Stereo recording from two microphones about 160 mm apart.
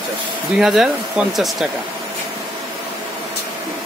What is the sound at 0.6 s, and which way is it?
Speech, centre (ahead or behind).